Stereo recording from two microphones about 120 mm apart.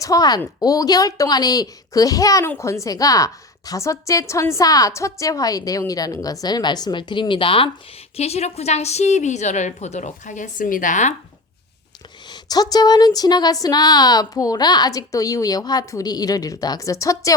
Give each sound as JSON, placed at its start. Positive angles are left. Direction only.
{"t": 0.0, "sound": "a woman's voice", "side_deg": 30}
{"t": 8.1, "sound": "a woman's voice", "side_deg": 60}
{"t": 12.3, "sound": "speech", "side_deg": 35}